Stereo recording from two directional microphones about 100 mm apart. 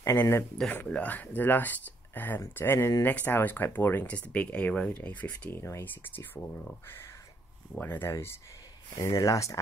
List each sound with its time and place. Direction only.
0.0 s speech: 25° left (ahead or behind)
0.6 s speech: 10° left (ahead or behind); by 9.6 s 30° left (ahead or behind)